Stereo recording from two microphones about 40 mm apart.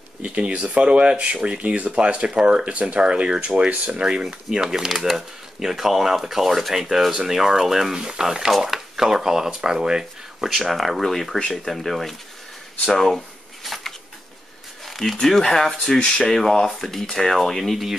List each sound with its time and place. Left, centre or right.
0.2 s speech: right; by 8.0 s centre
8.0 s speech: right
8.3 s speech: centre
10.4 s speech: centre
13.7 s a sound: centre
15.2 s speech: centre